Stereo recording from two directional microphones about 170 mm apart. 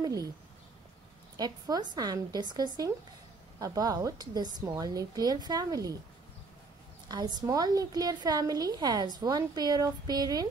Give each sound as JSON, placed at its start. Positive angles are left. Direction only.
{"t": 0.0, "sound": "speech", "side_deg": -20}
{"t": 1.3, "sound": "a woman's voice", "side_deg": -25}
{"t": 7.1, "sound": "a woman's voice", "side_deg": -25}